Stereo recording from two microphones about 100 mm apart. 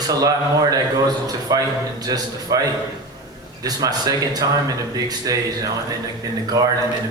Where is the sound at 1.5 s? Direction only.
40° right (ahead or behind).